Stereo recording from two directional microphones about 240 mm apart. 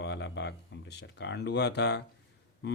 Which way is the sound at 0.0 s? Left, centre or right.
Left.